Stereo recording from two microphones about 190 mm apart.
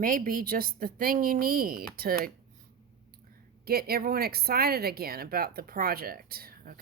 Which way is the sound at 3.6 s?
55° right (ahead or behind).